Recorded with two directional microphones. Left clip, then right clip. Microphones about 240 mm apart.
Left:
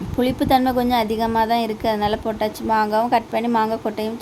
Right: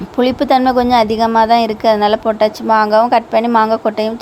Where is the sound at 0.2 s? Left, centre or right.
Centre.